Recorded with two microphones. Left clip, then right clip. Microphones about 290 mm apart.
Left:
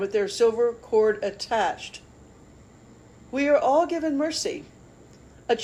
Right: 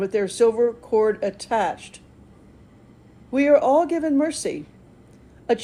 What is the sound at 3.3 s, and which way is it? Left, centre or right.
Speech, right.